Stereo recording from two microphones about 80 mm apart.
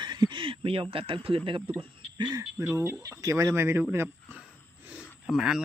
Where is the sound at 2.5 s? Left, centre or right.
Right.